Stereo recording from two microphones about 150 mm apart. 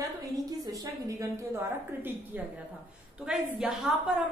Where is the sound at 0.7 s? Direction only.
20° right (ahead or behind).